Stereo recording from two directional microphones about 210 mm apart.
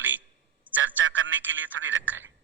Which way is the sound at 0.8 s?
65° right (ahead or behind).